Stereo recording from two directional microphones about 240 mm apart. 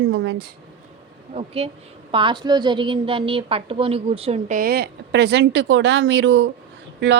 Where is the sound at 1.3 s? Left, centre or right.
Right.